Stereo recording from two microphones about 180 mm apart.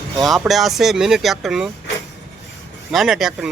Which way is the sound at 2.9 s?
Centre (ahead or behind).